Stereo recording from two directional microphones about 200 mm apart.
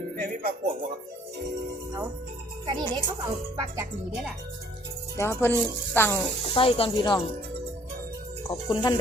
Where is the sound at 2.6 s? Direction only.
20° right (ahead or behind).